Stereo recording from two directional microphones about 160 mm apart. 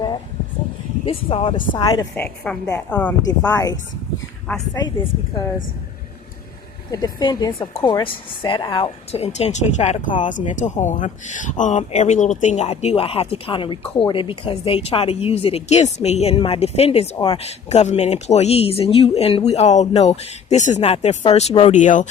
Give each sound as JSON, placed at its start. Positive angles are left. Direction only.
{"t": 1.0, "sound": "speech", "side_deg": 35}
{"t": 2.1, "sound": "a woman's voice", "side_deg": 5}
{"t": 3.2, "sound": "a woman's voice", "side_deg": 20}
{"t": 4.5, "sound": "a woman's voice", "side_deg": 10}
{"t": 6.9, "sound": "a woman's voice", "side_deg": 25}